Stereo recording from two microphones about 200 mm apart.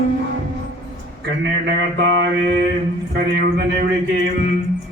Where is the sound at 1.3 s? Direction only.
60° right (ahead or behind).